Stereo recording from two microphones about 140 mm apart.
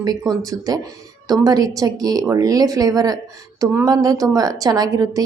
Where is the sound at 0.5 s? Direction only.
25° right (ahead or behind).